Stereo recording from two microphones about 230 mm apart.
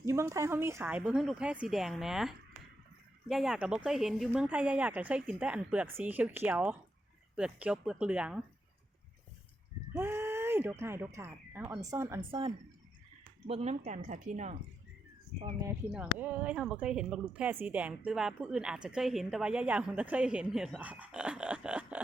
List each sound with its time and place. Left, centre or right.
0.0 s a woman's voice: centre
9.9 s speech: centre
12.3 s speech: right
15.6 s a woman's voice: centre